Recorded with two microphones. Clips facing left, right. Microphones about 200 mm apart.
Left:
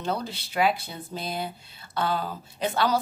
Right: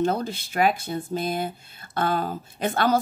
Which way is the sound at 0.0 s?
50° right (ahead or behind).